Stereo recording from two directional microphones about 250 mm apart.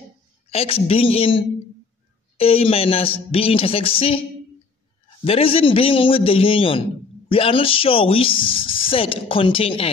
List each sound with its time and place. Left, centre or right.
0.5 s speech: left
5.2 s speech: left